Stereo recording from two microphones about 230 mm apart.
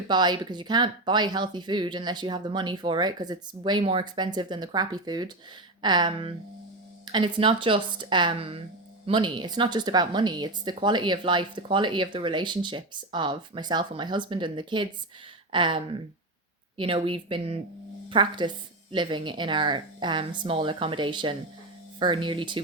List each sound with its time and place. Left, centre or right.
0.1 s speech: centre